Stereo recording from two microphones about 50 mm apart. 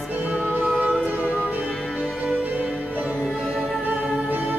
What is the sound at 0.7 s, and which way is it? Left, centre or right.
Music, centre.